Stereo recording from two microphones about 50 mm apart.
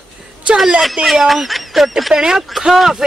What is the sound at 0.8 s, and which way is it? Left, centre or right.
Speech, centre.